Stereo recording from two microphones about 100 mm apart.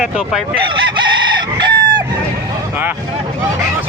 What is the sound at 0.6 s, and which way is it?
Chicken, 55° right (ahead or behind).